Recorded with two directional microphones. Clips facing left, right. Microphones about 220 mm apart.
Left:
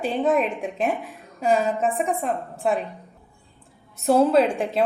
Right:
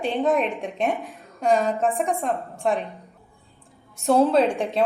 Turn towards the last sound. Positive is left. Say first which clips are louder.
# left 1 dB
turn(degrees=0)  # may be behind; listen again after turning